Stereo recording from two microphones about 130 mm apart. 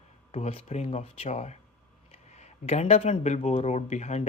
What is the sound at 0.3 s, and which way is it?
Speech, 50° left (ahead or behind).